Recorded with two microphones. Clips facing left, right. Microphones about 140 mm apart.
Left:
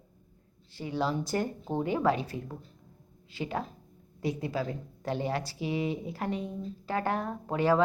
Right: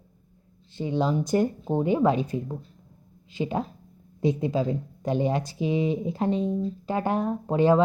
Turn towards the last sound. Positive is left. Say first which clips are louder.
# right 5 dB
turn(degrees=-20)  # may be behind; listen again after turning